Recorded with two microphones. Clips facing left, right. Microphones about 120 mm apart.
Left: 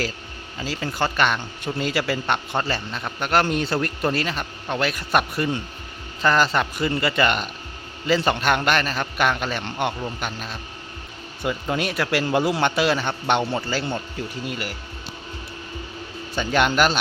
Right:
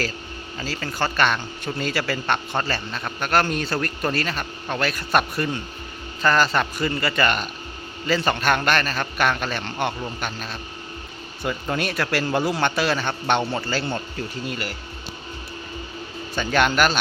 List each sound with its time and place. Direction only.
0.6 s speech: 15° left (ahead or behind)
16.3 s speech: 20° left (ahead or behind)